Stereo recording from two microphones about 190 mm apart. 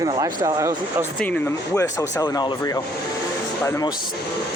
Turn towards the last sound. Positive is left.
turn(degrees=15)  # may be behind; listen again after turning